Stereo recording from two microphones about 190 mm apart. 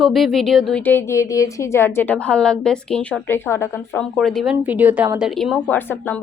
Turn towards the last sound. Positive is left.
turn(degrees=10)  # may be behind; listen again after turning